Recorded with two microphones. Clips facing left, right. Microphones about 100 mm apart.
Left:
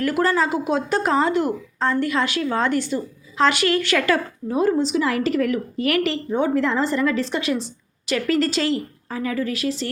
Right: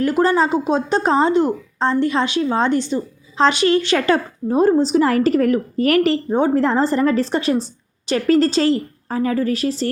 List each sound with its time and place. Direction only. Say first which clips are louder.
0.0 s a woman's voice: right 4 dB; 25° right (ahead or behind)